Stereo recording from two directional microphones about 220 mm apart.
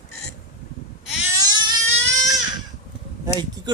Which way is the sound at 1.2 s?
15° right (ahead or behind).